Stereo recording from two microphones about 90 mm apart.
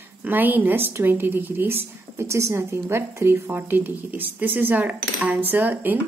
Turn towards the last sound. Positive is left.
turn(degrees=-20)  # may be behind; listen again after turning